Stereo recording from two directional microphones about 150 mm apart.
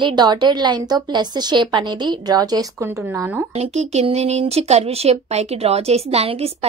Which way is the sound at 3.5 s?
45° right (ahead or behind).